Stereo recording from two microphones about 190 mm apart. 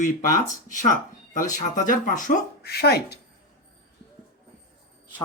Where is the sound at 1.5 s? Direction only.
45° left (ahead or behind); by 3.2 s 60° left (ahead or behind).